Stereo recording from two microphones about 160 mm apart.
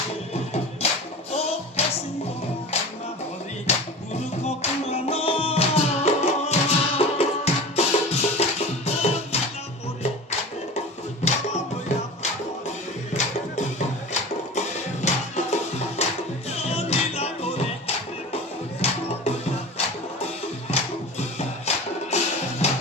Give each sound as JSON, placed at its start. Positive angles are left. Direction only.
{"t": 0.8, "sound": "music", "side_deg": 40}
{"t": 3.7, "sound": "music", "side_deg": 40}
{"t": 13.1, "sound": "music", "side_deg": 45}
{"t": 21.7, "sound": "music", "side_deg": 40}